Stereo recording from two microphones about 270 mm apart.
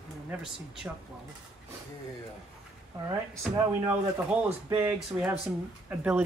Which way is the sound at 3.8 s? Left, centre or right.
Centre.